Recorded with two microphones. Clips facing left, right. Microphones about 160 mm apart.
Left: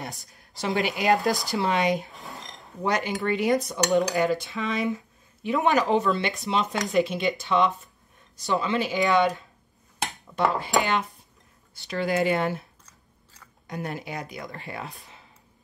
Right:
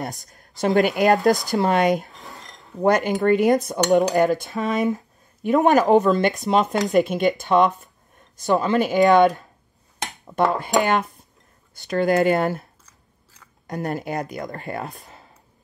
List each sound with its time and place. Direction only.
0.0 s cutlery: 45° right (ahead or behind)
2.3 s a sound: 20° left (ahead or behind)
2.8 s cutlery: 50° right (ahead or behind)
10.2 s speech: 45° right (ahead or behind)
10.8 s cutlery: 50° right (ahead or behind)
13.7 s cutlery: 45° right (ahead or behind)